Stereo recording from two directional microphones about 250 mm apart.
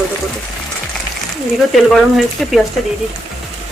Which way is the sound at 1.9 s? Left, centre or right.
Centre.